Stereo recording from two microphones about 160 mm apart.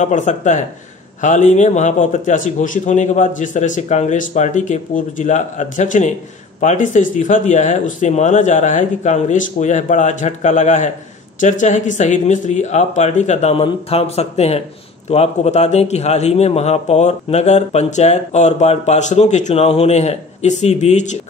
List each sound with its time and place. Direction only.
0.0 s a man's voice: 50° left (ahead or behind)